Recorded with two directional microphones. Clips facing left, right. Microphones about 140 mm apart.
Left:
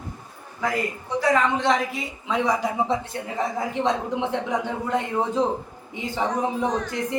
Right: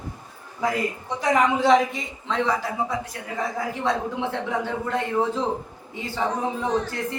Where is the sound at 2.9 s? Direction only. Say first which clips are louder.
Left 3 dB; 25° left (ahead or behind).